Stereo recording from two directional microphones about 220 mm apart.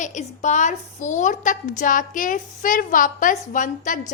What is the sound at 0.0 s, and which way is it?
A woman's voice, 35° left (ahead or behind).